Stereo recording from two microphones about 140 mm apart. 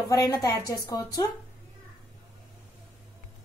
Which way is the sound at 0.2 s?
25° left (ahead or behind).